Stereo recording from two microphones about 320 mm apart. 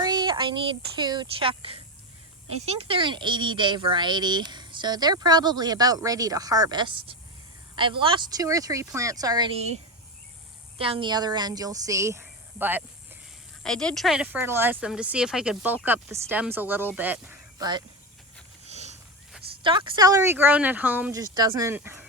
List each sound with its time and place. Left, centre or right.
0.0 s speech: centre
18.6 s wild animals: right
19.6 s speech: centre